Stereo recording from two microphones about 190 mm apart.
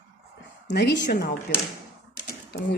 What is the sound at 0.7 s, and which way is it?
Speech, 60° left (ahead or behind).